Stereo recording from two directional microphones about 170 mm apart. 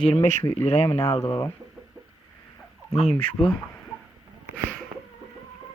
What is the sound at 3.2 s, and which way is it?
Speech, 35° left (ahead or behind).